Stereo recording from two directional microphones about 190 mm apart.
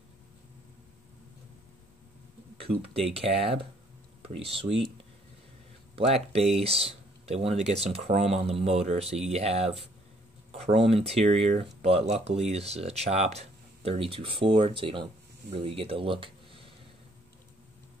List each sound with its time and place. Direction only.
2.6 s speech: 30° right (ahead or behind)
5.9 s speech: 30° right (ahead or behind)